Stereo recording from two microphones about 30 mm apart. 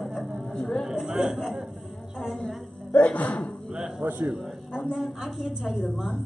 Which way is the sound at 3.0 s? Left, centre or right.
Left.